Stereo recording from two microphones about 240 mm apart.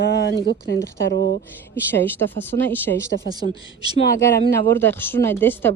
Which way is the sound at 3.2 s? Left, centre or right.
Left.